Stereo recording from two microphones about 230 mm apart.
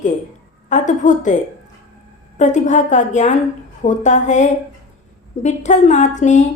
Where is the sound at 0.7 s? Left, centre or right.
Left.